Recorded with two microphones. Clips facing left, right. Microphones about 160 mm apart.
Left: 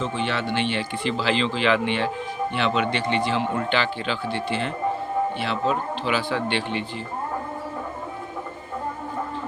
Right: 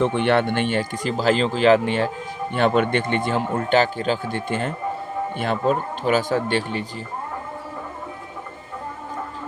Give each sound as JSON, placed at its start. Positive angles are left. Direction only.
{"t": 0.0, "sound": "speech", "side_deg": -60}